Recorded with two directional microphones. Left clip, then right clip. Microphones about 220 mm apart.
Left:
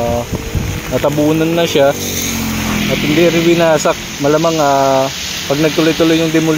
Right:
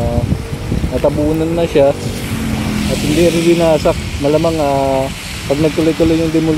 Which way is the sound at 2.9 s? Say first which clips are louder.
Left 1 dB; 35° right (ahead or behind).